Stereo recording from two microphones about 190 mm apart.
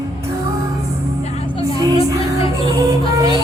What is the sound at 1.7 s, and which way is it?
Music, 15° right (ahead or behind).